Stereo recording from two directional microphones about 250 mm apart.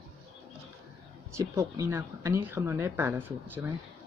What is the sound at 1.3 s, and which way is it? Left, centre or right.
Speech, centre.